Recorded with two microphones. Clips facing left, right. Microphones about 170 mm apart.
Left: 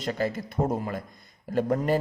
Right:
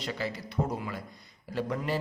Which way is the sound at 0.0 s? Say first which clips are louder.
Left 6 dB; 45° left (ahead or behind).